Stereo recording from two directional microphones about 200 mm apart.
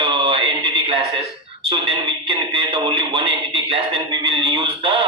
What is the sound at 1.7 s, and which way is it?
Music, 25° right (ahead or behind).